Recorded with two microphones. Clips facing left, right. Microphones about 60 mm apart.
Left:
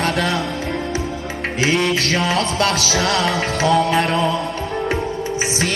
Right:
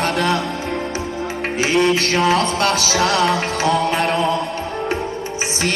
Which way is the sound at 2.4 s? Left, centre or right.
Right.